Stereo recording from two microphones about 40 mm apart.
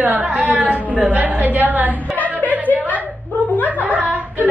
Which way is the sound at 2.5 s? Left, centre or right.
Right.